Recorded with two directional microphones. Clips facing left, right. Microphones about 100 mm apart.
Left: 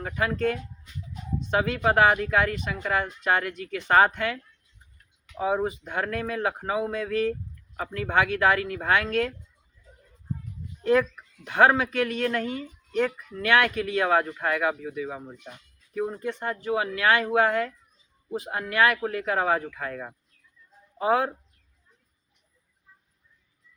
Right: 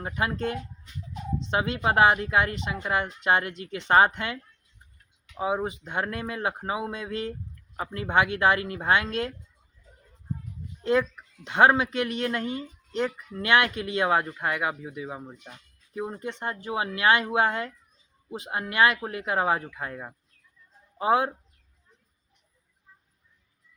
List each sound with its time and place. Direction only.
0.0 s speech: 20° right (ahead or behind)
5.4 s speech: 20° right (ahead or behind)
11.4 s speech: 20° right (ahead or behind)